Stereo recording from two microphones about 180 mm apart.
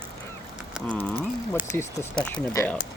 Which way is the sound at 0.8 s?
10° left (ahead or behind).